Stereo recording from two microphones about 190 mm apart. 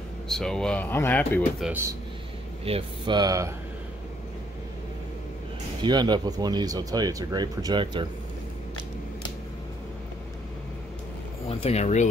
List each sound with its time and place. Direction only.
0.3 s speech: centre (ahead or behind)
1.7 s speech: 15° right (ahead or behind)
2.6 s speech: 25° right (ahead or behind)
5.8 s speech: 20° right (ahead or behind)
11.4 s speech: 30° left (ahead or behind)